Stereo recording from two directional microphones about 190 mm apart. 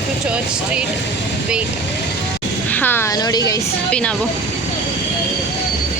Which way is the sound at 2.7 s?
10° left (ahead or behind).